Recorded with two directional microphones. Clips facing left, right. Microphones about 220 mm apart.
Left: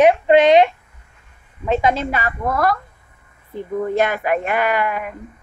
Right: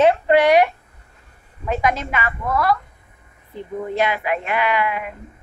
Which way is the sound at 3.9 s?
50° left (ahead or behind).